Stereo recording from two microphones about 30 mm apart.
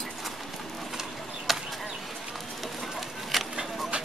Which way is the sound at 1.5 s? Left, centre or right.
Centre.